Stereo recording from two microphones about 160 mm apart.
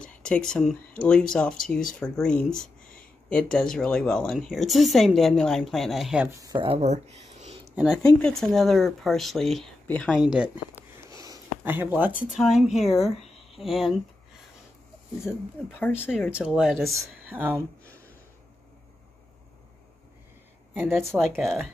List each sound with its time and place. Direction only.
0.0 s a woman's voice: 5° left (ahead or behind)
6.2 s speech: 20° right (ahead or behind); by 7.5 s 45° right (ahead or behind)
7.7 s a woman's voice: 5° right (ahead or behind)
10.1 s a woman's voice: 5° right (ahead or behind)
11.1 s a sound: 15° right (ahead or behind)
12.3 s a woman's voice: centre (ahead or behind)
15.8 s speech: 15° left (ahead or behind)
16.3 s a woman's voice: 5° right (ahead or behind)
20.7 s speech: 15° right (ahead or behind)
21.4 s a woman's voice: centre (ahead or behind)